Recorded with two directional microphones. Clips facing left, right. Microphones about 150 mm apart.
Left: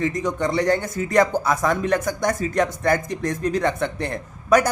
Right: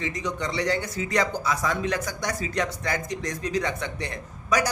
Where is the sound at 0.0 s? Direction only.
50° left (ahead or behind).